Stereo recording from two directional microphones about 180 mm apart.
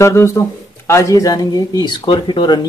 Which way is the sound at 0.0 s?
15° left (ahead or behind).